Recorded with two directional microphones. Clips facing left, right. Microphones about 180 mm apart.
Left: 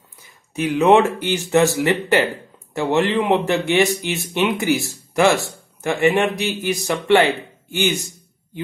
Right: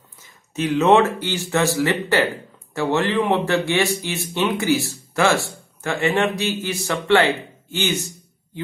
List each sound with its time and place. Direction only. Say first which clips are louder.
0.6 s speech: left 1 dB; 15° left (ahead or behind)